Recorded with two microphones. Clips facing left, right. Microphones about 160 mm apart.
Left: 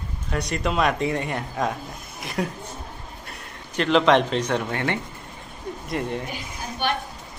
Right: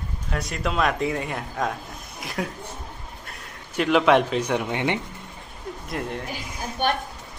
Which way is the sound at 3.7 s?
5° right (ahead or behind).